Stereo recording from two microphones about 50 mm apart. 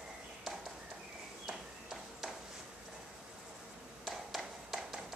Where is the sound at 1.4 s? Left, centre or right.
Centre.